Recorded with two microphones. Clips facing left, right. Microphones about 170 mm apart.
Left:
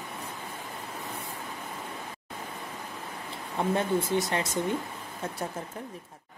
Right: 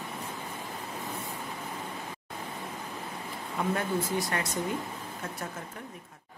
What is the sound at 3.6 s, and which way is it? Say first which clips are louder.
Speech: left 3 dB; 25° left (ahead or behind).